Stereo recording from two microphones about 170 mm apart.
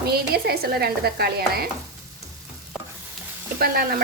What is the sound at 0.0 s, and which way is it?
A woman's voice, 65° right (ahead or behind).